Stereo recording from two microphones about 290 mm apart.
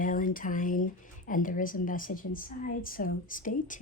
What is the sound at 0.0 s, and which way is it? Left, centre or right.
Speech, left.